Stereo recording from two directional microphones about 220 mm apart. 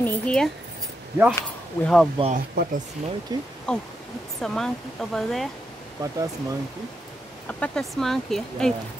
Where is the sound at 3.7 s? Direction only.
5° left (ahead or behind).